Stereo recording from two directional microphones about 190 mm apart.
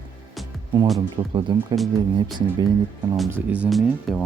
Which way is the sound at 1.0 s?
25° right (ahead or behind).